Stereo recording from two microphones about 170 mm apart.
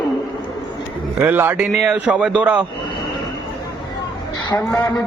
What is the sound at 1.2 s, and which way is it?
A man's voice, 10° right (ahead or behind).